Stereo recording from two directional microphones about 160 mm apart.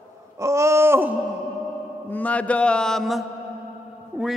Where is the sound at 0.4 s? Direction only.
20° right (ahead or behind).